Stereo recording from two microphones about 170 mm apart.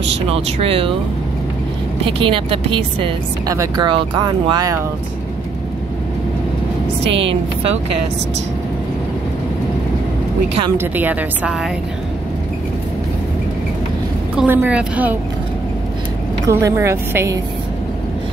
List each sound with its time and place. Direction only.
0.0 s a woman's voice: 35° right (ahead or behind)
2.0 s a woman's voice: 30° right (ahead or behind)
7.1 s a woman's voice: 30° right (ahead or behind)
10.8 s a woman's voice: 10° right (ahead or behind)
14.3 s a woman's voice: 10° right (ahead or behind)
16.4 s a woman's voice: 15° right (ahead or behind)